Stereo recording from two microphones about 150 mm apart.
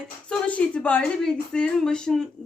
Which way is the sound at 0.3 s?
10° left (ahead or behind).